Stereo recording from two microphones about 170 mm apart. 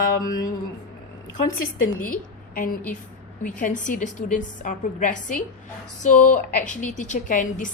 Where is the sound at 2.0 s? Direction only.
55° left (ahead or behind).